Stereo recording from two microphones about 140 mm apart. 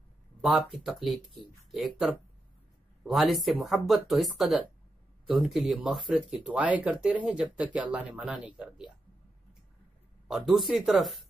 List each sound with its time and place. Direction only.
0.4 s speech: centre (ahead or behind)
10.2 s speech: centre (ahead or behind)